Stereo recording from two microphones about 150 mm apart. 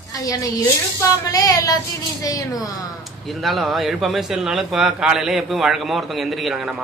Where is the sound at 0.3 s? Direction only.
25° left (ahead or behind).